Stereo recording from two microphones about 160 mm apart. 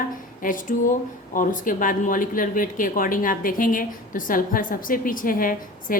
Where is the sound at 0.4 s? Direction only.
55° left (ahead or behind).